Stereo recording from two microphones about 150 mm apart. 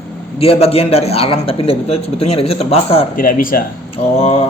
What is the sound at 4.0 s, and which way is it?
Speech, 45° left (ahead or behind).